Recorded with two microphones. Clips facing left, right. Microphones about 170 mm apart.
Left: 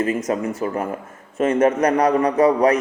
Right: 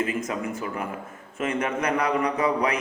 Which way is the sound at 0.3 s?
40° left (ahead or behind).